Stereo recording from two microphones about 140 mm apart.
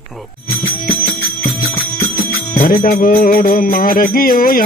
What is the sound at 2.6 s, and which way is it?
Music, 90° left.